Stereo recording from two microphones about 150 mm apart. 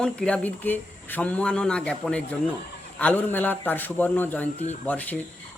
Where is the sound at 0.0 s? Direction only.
5° left (ahead or behind).